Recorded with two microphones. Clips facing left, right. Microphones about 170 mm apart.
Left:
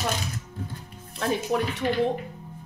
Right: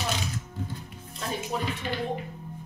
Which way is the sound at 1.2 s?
65° left (ahead or behind).